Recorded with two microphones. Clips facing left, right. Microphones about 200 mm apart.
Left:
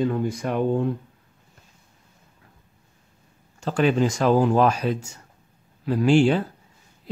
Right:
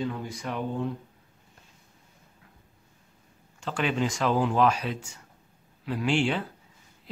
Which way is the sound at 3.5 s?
40° left (ahead or behind).